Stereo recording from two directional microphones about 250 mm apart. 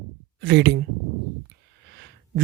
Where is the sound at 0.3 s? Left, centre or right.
Right.